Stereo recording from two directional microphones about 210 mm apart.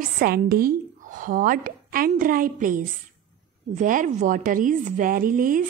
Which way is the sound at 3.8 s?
40° right (ahead or behind).